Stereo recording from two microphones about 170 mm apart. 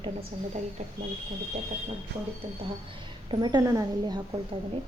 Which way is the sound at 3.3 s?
25° right (ahead or behind).